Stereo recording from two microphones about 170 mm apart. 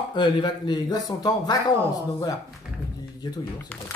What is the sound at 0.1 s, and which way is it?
Speech, 25° left (ahead or behind).